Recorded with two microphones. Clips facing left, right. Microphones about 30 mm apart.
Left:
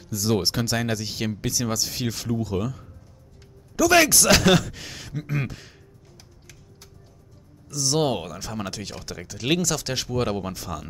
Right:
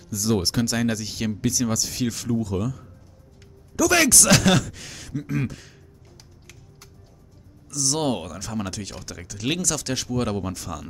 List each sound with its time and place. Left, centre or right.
0.1 s speech: centre
7.6 s speech: centre